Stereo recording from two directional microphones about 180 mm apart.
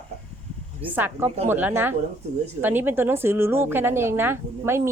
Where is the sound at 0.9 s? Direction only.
10° right (ahead or behind).